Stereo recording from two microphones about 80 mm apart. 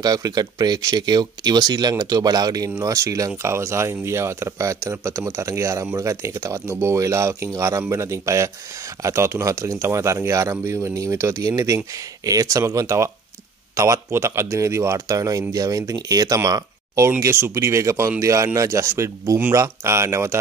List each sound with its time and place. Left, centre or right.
0.0 s speech: right
2.7 s speech: right